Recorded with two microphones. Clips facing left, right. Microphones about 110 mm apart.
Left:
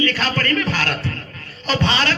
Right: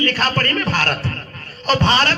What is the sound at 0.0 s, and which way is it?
A man's voice, 45° right (ahead or behind).